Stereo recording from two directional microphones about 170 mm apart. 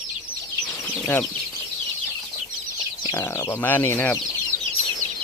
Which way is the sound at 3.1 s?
20° left (ahead or behind).